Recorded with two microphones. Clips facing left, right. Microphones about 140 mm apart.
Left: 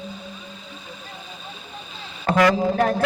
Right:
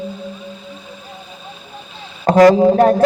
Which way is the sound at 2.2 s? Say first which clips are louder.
Right 9 dB; 35° right (ahead or behind).